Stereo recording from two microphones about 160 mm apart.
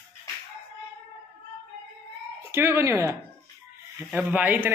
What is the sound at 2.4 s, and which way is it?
A man's voice, 15° right (ahead or behind).